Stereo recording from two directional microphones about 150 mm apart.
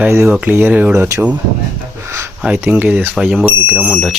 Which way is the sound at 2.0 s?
15° right (ahead or behind).